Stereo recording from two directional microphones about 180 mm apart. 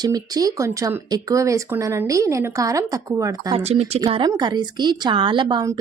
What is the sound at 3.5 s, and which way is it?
A woman's voice, 35° right (ahead or behind).